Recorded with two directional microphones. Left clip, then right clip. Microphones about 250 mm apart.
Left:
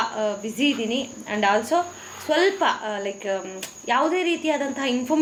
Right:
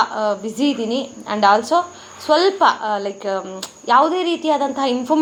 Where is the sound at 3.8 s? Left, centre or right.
Centre.